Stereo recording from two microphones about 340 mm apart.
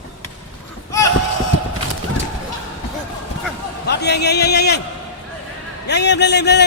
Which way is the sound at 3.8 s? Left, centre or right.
Left.